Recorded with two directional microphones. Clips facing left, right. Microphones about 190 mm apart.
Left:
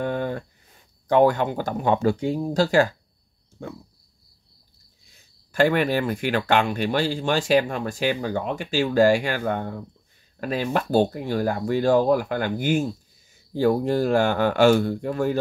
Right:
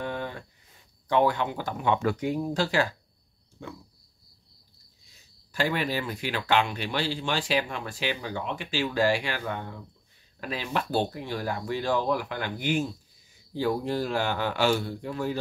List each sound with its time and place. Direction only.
0.0 s a sound: 50° left (ahead or behind)
1.0 s speech: 45° left (ahead or behind)
5.5 s speech: 55° left (ahead or behind)